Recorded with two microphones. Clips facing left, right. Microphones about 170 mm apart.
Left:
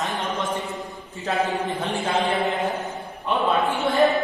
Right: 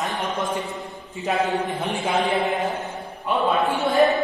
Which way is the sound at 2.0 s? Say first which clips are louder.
Right 1 dB; 15° right (ahead or behind).